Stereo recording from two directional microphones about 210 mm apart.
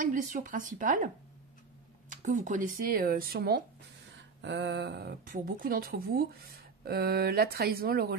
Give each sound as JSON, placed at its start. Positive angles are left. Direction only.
{"t": 0.0, "sound": "speech", "side_deg": -40}